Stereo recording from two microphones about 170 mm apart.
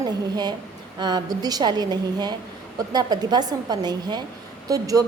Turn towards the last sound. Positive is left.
turn(degrees=-20)  # may be behind; listen again after turning